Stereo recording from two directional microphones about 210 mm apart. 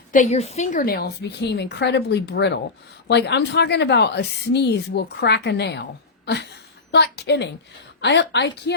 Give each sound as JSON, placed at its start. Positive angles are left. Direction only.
{"t": 0.1, "sound": "a woman's voice", "side_deg": 35}
{"t": 6.2, "sound": "a sound", "side_deg": 55}
{"t": 6.9, "sound": "a woman's voice", "side_deg": 55}